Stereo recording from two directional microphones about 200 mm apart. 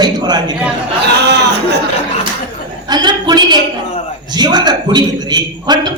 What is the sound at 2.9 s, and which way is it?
A man's voice, 20° right (ahead or behind).